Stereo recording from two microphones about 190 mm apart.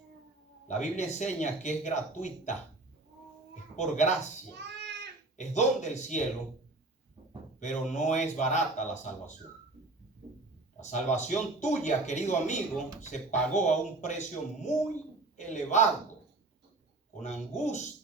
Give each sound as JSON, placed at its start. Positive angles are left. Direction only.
{"t": 0.7, "sound": "speech", "side_deg": 40}
{"t": 4.5, "sound": "a sound", "side_deg": -65}
{"t": 5.4, "sound": "speech", "side_deg": 40}
{"t": 7.6, "sound": "speech", "side_deg": 40}
{"t": 10.8, "sound": "speech", "side_deg": 40}
{"t": 17.2, "sound": "speech", "side_deg": 40}